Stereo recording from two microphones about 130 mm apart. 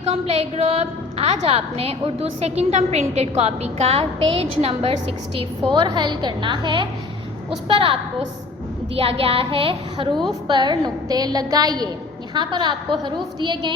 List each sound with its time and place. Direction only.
0.1 s a woman's voice: 50° right (ahead or behind)
5.7 s a woman's voice: 35° right (ahead or behind)
9.0 s a woman's voice: 50° right (ahead or behind)